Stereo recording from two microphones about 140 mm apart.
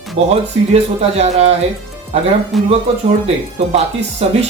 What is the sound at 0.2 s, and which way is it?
Speech, 45° right (ahead or behind).